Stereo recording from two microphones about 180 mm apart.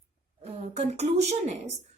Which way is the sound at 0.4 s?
35° right (ahead or behind).